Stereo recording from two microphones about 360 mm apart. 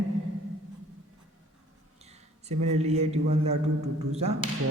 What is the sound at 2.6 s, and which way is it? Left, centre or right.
A man's voice, centre.